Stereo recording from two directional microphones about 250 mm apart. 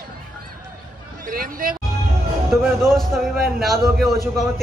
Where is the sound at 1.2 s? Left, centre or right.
Right.